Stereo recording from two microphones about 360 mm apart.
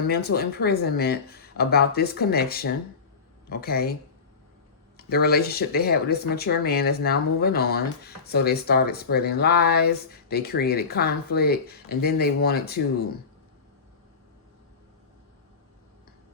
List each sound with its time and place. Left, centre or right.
0.1 s speech: left
4.9 s speech: left